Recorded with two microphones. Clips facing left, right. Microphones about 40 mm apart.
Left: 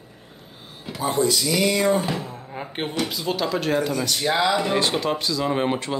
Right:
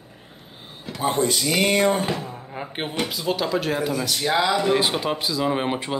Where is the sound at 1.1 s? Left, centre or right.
Right.